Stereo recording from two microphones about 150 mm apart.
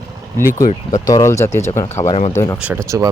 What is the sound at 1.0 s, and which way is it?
Speech, 20° left (ahead or behind).